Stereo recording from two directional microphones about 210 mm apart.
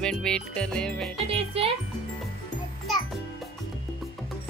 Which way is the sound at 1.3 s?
30° right (ahead or behind).